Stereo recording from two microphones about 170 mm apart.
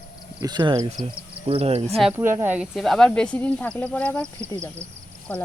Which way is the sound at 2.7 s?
Centre (ahead or behind).